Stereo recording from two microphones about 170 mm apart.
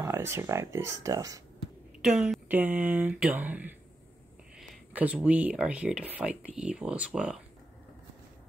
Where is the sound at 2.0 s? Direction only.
5° right (ahead or behind).